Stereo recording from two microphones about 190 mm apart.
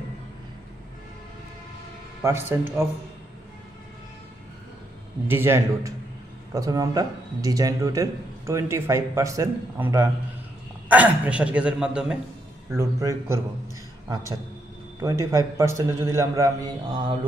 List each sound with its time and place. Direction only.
2.2 s speech: 10° right (ahead or behind)
5.3 s a man's voice: 10° right (ahead or behind)
12.7 s a man's voice: 15° right (ahead or behind)